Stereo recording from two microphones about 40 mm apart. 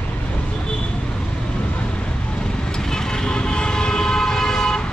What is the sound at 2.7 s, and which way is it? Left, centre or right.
Vehicle, centre.